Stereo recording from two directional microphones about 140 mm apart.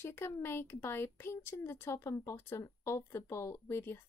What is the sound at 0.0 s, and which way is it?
Speech, 15° left (ahead or behind).